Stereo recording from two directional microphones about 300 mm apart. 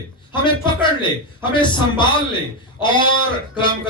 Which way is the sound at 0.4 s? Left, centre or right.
Centre.